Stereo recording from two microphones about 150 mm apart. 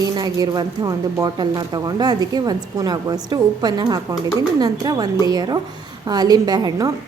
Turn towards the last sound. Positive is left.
turn(degrees=-25)  # may be behind; listen again after turning